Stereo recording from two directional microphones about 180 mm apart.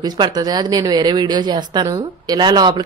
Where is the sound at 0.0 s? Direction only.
20° right (ahead or behind).